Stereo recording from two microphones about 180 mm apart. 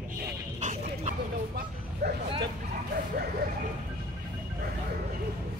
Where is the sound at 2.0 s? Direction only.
65° right (ahead or behind).